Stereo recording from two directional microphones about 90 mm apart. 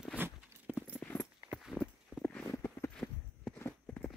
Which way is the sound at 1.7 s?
10° right (ahead or behind).